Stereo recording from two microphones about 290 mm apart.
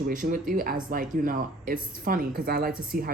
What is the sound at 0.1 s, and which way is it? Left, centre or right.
Speech, right.